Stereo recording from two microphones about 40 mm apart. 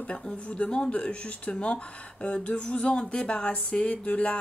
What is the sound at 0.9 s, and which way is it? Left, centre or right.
Speech, left.